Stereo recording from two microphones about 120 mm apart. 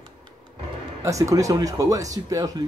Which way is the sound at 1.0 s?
25° right (ahead or behind).